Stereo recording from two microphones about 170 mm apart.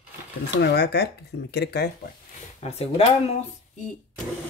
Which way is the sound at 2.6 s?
40° left (ahead or behind).